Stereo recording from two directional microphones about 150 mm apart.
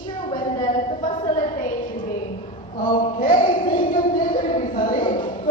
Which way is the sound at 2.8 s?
65° left (ahead or behind).